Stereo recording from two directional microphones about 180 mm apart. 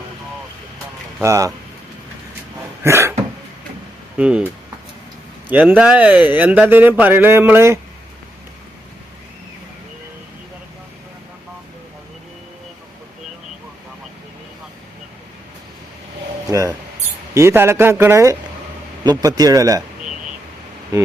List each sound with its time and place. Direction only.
1.2 s a man's voice: 15° right (ahead or behind)
2.8 s cough: 15° right (ahead or behind)
4.2 s speech: 5° right (ahead or behind)
5.5 s a man's voice: 10° right (ahead or behind)
16.5 s mouse: 15° right (ahead or behind)
17.3 s a man's voice: 15° right (ahead or behind)